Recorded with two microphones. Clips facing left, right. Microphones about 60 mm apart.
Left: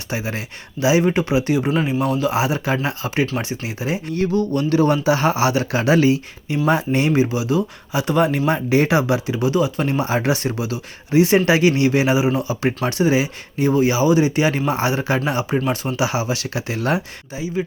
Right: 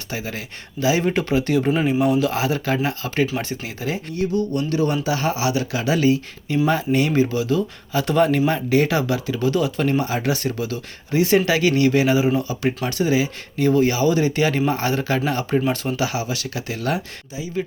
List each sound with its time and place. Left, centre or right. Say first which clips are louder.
0.1 s speech: left 3 dB; left; by 2.3 s centre
2.3 s speech: left 2 dB; centre
4.1 s speech: left 3 dB; left
4.5 s speech: left 4 dB; left
7.1 s speech: left 1 dB; centre
9.5 s speech: even; centre
10.0 s speech: left 3 dB; left
13.2 s speech: even; centre
16.0 s speech: left 3 dB; left